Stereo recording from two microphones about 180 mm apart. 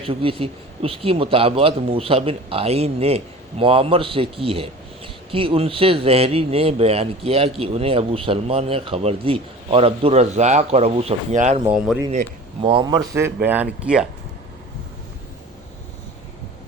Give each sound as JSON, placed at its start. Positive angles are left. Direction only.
{"t": 0.0, "sound": "speech", "side_deg": -30}
{"t": 12.6, "sound": "speech", "side_deg": -25}